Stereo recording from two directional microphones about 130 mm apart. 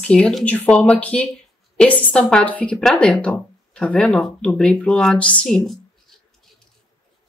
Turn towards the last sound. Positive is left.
turn(degrees=0)  # may be behind; listen again after turning